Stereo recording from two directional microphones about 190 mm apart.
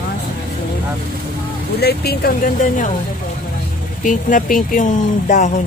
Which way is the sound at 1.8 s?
55° left (ahead or behind).